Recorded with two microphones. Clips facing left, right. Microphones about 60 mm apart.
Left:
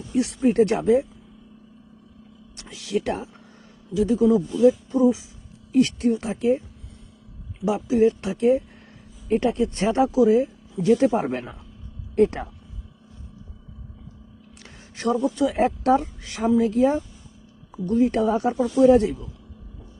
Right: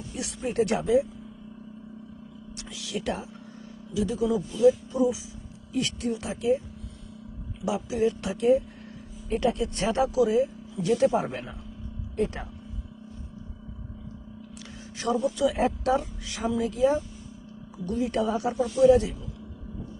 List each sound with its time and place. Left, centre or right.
0.1 s speech: left
2.6 s speech: left
7.6 s speech: left
14.9 s speech: left